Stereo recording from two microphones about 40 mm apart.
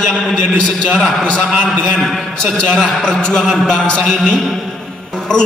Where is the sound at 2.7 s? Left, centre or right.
Centre.